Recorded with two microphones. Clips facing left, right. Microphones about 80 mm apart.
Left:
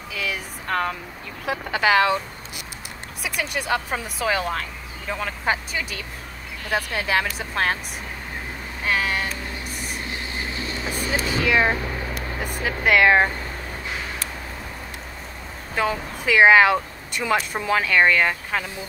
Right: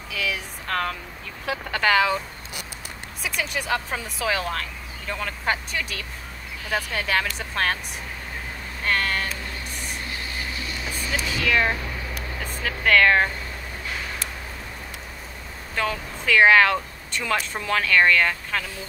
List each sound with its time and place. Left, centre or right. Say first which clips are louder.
0.1 s a sound: even; centre
1.4 s speech: left 2 dB; centre
8.8 s a sound: left 1 dB; centre
10.1 s vehicle: left 2 dB; left
11.4 s speech: left 2 dB; centre
15.7 s speech: left 3 dB; centre